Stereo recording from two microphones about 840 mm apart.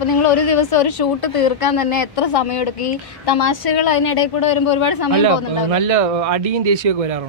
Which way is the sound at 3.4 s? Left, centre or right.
Left.